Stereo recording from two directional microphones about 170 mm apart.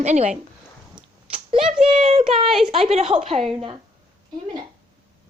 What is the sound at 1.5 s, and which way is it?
Speech, 5° right (ahead or behind).